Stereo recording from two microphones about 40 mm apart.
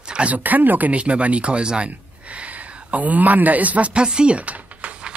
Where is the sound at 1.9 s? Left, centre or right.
Right.